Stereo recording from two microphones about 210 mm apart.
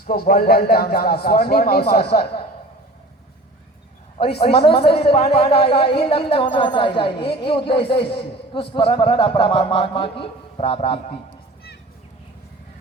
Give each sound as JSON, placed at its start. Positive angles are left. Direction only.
{"t": 0.1, "sound": "a man's voice", "side_deg": 45}
{"t": 4.6, "sound": "speech", "side_deg": 25}